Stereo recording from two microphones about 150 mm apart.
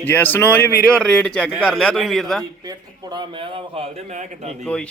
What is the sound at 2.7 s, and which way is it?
Speech, 30° right (ahead or behind).